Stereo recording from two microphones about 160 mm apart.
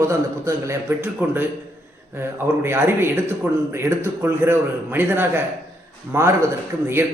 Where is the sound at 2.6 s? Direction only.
15° right (ahead or behind).